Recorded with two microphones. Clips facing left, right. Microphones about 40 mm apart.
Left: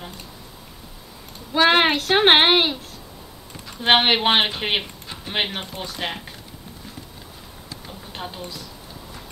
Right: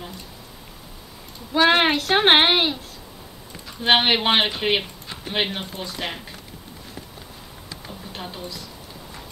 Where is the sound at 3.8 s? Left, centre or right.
Centre.